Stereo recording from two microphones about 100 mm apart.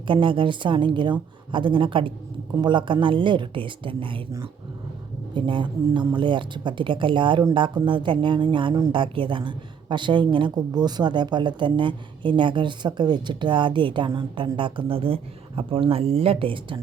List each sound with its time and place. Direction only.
0.1 s a woman's voice: 55° right (ahead or behind)
5.3 s a woman's voice: 55° right (ahead or behind)